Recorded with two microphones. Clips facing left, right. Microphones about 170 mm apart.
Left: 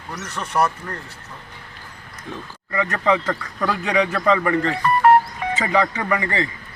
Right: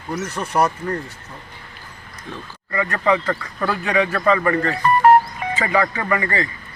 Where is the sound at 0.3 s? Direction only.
15° right (ahead or behind).